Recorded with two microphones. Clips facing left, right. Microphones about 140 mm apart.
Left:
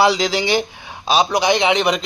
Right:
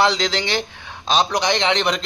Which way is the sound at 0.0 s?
10° left (ahead or behind).